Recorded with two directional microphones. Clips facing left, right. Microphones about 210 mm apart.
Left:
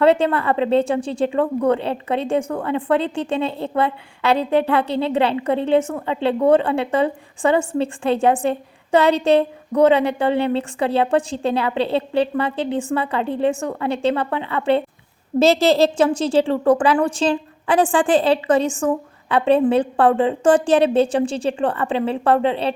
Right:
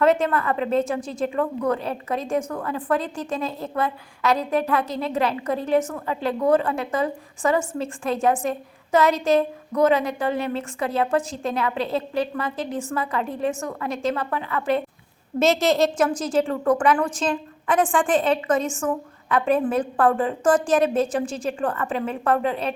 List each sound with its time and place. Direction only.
0.0 s a woman's voice: 30° left (ahead or behind)